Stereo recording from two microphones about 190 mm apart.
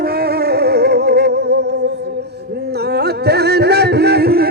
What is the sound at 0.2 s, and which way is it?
Music, 55° right (ahead or behind).